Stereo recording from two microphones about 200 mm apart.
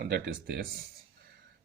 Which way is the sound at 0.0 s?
50° right (ahead or behind).